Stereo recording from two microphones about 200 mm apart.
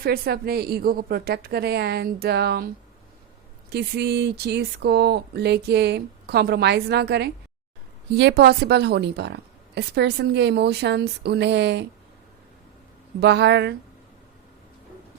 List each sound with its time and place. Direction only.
0.0 s a woman's voice: 50° right (ahead or behind)
3.7 s a woman's voice: 55° right (ahead or behind)
13.1 s a woman's voice: 55° right (ahead or behind)